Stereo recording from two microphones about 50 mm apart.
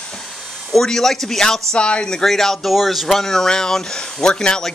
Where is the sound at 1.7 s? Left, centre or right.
Left.